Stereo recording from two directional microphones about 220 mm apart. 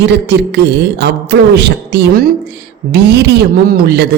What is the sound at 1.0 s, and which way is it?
A woman's voice, 50° right (ahead or behind).